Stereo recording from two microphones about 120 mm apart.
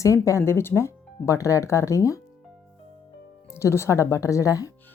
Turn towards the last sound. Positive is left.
turn(degrees=30)  # may be behind; listen again after turning